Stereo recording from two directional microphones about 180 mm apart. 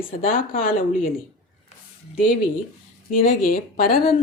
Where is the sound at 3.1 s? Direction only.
55° left (ahead or behind).